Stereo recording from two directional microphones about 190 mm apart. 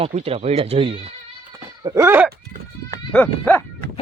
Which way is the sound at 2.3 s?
50° right (ahead or behind).